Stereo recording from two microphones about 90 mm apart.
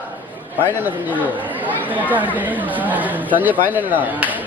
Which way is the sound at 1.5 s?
20° right (ahead or behind).